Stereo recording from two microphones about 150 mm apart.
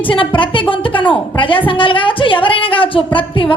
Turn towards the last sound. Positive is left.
turn(degrees=35)  # may be behind; listen again after turning